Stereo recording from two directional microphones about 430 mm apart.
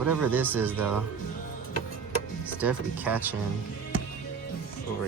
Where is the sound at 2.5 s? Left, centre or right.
Centre.